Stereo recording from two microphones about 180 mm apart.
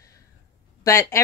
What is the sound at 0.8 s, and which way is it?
Speech, 15° left (ahead or behind).